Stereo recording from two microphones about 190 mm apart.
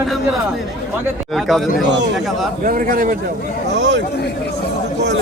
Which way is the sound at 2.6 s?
50° right (ahead or behind).